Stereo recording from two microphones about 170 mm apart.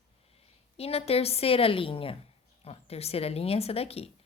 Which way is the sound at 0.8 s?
35° left (ahead or behind).